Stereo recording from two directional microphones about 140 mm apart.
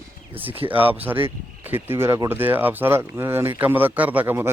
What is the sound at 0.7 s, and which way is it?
Speech, 15° right (ahead or behind).